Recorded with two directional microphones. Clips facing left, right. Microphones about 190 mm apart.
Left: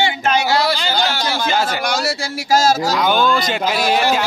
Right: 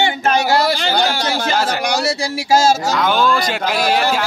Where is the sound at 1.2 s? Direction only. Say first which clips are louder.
Right 1 dB; 40° right (ahead or behind).